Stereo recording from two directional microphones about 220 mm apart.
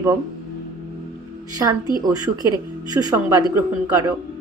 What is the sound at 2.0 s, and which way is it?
Speech, 15° right (ahead or behind).